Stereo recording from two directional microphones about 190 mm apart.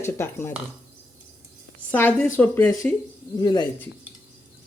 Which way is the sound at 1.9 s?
5° left (ahead or behind).